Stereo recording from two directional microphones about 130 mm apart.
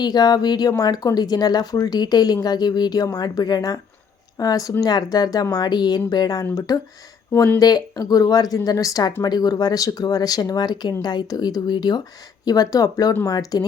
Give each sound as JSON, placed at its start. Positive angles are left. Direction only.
{"t": 0.0, "sound": "speech", "side_deg": 30}
{"t": 7.6, "sound": "speech", "side_deg": 30}